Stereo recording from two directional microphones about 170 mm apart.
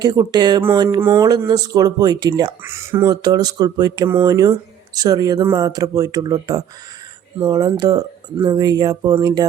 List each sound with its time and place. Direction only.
0.0 s speech: 25° right (ahead or behind)